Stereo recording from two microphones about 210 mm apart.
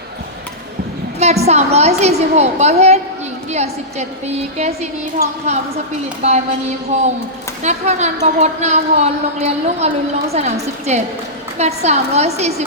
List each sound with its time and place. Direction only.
1.2 s a woman's voice: 30° right (ahead or behind)
7.6 s a woman's voice: 35° right (ahead or behind)